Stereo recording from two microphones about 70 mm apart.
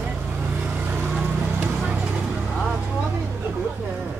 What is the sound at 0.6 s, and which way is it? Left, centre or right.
Vehicle, centre.